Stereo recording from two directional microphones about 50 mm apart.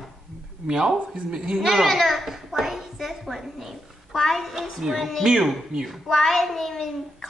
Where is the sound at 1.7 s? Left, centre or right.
Centre.